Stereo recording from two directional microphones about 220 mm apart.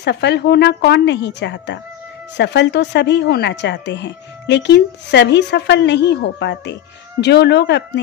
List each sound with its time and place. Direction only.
0.0 s speech: 50° left (ahead or behind)